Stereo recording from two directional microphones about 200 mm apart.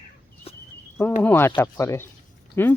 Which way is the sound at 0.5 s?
30° left (ahead or behind).